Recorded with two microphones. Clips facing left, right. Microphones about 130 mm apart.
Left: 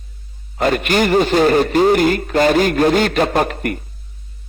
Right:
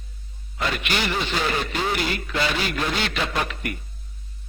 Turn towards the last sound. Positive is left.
turn(degrees=50)  # may be behind; listen again after turning